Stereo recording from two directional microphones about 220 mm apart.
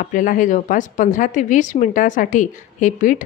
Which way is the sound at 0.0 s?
35° left (ahead or behind).